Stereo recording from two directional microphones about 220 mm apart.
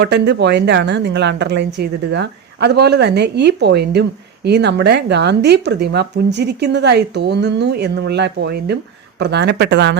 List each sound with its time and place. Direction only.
0.0 s speech: 50° right (ahead or behind)